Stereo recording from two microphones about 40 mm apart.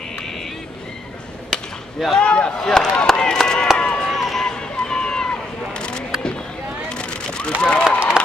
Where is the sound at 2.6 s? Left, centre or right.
Centre.